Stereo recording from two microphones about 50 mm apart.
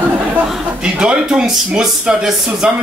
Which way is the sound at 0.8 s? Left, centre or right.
Centre.